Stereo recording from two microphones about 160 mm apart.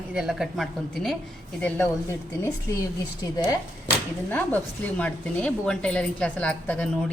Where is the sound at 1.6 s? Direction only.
15° left (ahead or behind).